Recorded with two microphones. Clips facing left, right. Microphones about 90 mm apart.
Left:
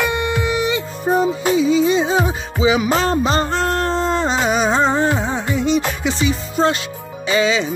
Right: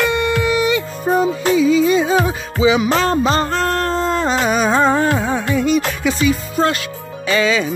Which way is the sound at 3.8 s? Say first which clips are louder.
Right 1 dB; 30° left (ahead or behind).